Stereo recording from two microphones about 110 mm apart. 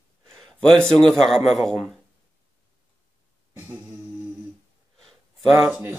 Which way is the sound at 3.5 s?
15° right (ahead or behind).